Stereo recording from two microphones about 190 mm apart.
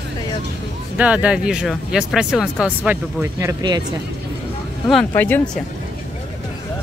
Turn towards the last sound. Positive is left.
turn(degrees=10)  # may be behind; listen again after turning